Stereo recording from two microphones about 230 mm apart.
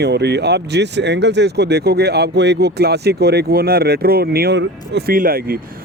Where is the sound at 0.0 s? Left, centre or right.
Right.